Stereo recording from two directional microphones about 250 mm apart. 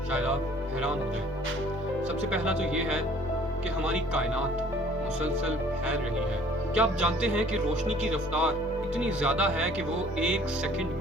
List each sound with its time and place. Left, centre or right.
2.3 s speech: centre
6.7 s speech: centre